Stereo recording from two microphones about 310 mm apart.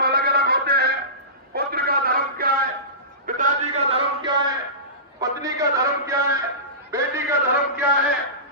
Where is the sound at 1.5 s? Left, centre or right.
Right; by 4.5 s centre.